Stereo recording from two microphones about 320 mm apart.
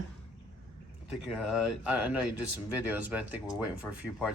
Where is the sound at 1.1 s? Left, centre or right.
Centre.